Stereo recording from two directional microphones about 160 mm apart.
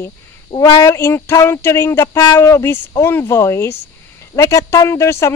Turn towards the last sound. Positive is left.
turn(degrees=20)  # may be behind; listen again after turning